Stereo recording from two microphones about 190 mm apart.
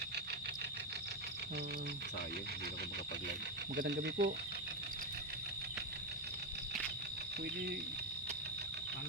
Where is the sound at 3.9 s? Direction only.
65° right (ahead or behind).